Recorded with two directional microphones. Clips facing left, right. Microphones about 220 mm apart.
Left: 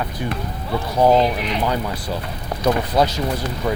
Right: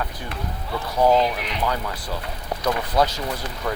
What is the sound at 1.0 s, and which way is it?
Speech, 25° left (ahead or behind).